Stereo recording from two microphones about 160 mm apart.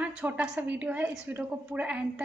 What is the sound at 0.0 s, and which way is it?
A woman's voice, 10° right (ahead or behind).